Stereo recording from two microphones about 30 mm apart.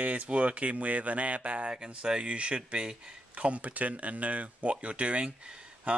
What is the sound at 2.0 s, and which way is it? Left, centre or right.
Speech, right.